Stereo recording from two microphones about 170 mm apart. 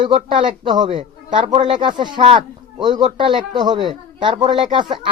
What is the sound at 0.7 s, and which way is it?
A man's voice, 25° right (ahead or behind).